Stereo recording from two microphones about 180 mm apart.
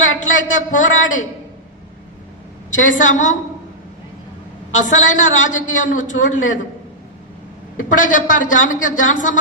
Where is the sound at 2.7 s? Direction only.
90° left.